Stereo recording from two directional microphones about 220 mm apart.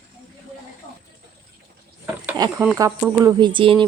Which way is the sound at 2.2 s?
20° right (ahead or behind).